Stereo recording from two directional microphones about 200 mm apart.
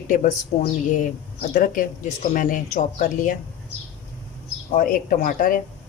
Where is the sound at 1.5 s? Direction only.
40° left (ahead or behind).